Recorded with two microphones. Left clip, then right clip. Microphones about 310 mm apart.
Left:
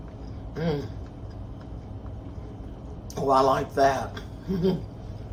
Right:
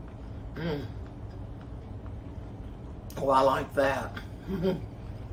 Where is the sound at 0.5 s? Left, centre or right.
Centre.